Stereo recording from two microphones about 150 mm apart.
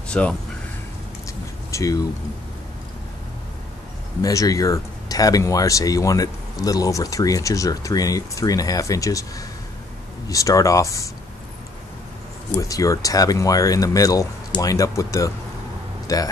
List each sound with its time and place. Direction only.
0.1 s speech: 5° left (ahead or behind)
1.7 s speech: 20° left (ahead or behind)
4.2 s speech: 20° left (ahead or behind)
10.2 s speech: 20° left (ahead or behind)
12.5 s speech: 20° left (ahead or behind)